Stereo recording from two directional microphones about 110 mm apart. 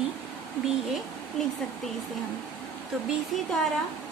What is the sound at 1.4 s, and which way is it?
Speech, 5° left (ahead or behind).